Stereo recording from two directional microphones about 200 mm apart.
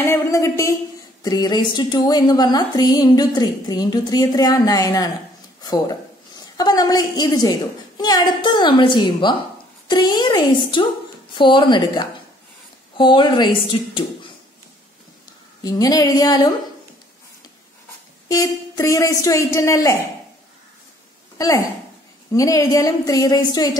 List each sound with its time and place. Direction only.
0.0 s speech: 15° left (ahead or behind)
15.6 s speech: 20° left (ahead or behind)
18.3 s speech: 15° left (ahead or behind)
21.4 s speech: 15° left (ahead or behind)